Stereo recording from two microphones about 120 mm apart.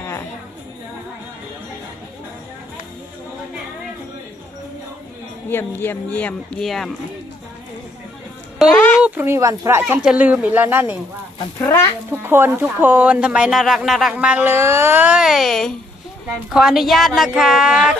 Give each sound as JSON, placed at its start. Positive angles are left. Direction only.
{"t": 5.5, "sound": "speech", "side_deg": 20}
{"t": 6.6, "sound": "a woman's voice", "side_deg": 0}
{"t": 8.5, "sound": "a sound", "side_deg": 0}
{"t": 9.0, "sound": "speech", "side_deg": -15}
{"t": 12.2, "sound": "speech", "side_deg": -20}
{"t": 14.1, "sound": "a woman's voice", "side_deg": -10}